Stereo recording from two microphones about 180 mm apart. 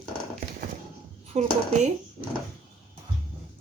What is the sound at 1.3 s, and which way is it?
Speech, 40° right (ahead or behind).